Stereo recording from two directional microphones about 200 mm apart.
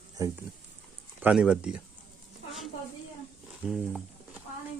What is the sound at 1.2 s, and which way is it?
Speech, 5° right (ahead or behind).